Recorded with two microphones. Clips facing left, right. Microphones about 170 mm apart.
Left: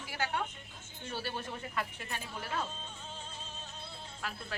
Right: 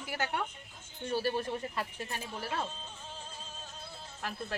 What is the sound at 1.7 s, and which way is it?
Speech, 35° right (ahead or behind).